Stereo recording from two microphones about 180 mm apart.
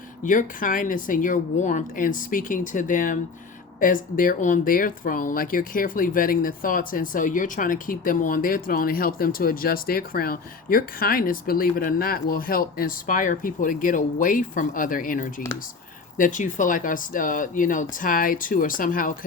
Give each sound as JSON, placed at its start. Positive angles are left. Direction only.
{"t": 0.2, "sound": "speech", "side_deg": 45}